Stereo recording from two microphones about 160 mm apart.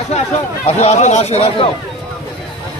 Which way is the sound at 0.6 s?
40° left (ahead or behind).